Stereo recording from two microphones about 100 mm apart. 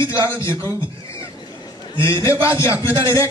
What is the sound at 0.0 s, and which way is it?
Speech, 30° left (ahead or behind).